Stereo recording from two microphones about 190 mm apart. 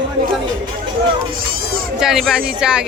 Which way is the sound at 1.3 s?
50° right (ahead or behind).